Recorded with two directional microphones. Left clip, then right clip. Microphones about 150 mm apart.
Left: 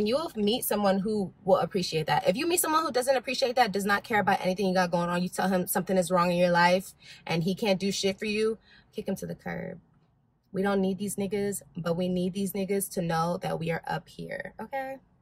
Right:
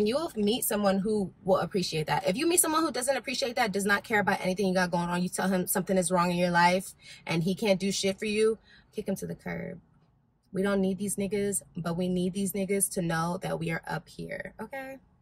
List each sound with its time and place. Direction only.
0.0 s speech: 15° left (ahead or behind)